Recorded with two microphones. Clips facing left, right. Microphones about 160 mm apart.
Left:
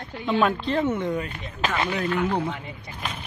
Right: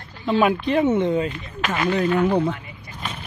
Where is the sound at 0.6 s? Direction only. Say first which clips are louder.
Right 5 dB; 20° right (ahead or behind).